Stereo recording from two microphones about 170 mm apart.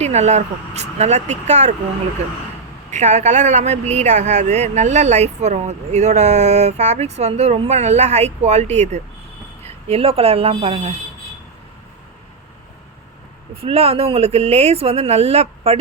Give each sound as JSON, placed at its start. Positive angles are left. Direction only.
{"t": 0.0, "sound": "speech", "side_deg": -40}
{"t": 2.9, "sound": "speech", "side_deg": -40}
{"t": 13.6, "sound": "speech", "side_deg": -35}